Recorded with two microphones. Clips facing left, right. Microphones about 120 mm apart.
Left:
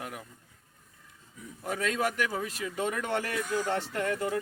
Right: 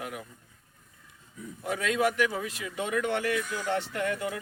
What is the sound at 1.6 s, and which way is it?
Speech, 40° left (ahead or behind).